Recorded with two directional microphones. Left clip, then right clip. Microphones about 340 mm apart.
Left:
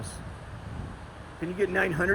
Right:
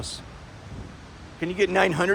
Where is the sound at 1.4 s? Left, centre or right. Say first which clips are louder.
Right 5 dB; centre.